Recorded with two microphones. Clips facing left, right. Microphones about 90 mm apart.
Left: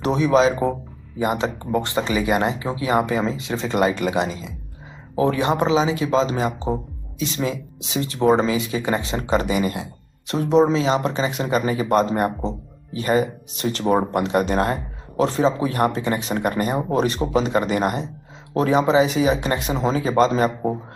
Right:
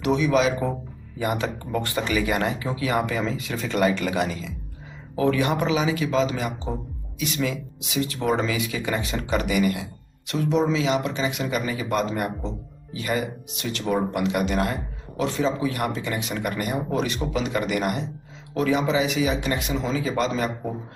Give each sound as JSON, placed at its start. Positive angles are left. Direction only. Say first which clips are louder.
{"t": 0.0, "sound": "speech", "louder": "left 4 dB", "side_deg": 35}